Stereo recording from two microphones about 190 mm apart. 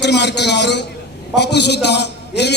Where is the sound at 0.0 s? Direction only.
65° left (ahead or behind).